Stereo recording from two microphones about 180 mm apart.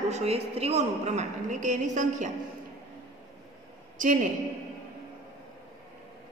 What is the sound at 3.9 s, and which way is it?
Speech, 45° right (ahead or behind).